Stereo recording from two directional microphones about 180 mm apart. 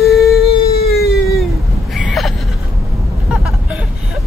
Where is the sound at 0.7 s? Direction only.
60° left (ahead or behind).